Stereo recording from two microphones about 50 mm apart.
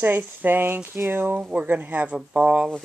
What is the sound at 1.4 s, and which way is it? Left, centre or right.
Speech, right.